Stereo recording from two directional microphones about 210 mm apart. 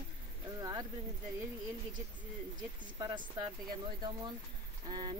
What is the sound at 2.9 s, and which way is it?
Speech, 20° right (ahead or behind).